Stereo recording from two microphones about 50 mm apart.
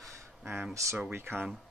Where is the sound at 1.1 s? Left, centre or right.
Right.